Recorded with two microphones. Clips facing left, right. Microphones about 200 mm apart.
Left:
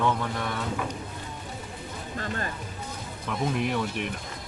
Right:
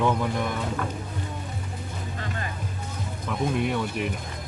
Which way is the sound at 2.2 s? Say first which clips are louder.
Left 3 dB; 45° left (ahead or behind).